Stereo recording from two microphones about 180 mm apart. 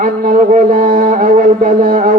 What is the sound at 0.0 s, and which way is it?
A man's voice, 50° right (ahead or behind).